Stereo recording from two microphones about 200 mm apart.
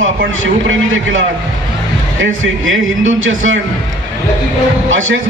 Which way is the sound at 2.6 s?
80° right.